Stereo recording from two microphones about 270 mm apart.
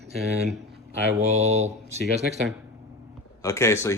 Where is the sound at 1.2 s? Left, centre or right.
Right.